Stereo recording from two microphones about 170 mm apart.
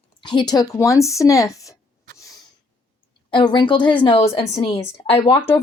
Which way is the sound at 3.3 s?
25° left (ahead or behind).